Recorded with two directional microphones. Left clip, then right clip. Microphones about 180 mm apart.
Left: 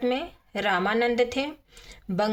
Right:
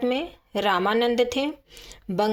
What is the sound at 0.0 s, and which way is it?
Speech, 30° right (ahead or behind).